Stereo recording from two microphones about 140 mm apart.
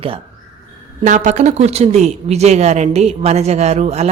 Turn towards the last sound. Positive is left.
turn(degrees=-50)  # may be behind; listen again after turning